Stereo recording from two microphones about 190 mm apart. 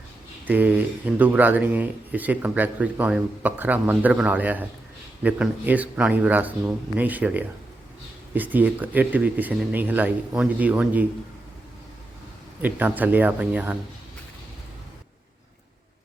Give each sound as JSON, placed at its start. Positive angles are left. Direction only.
{"t": 0.4, "sound": "speech", "side_deg": -10}
{"t": 12.6, "sound": "speech", "side_deg": -10}